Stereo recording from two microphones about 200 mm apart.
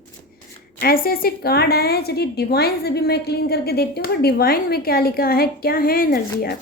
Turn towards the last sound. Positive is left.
turn(degrees=50)  # may be behind; listen again after turning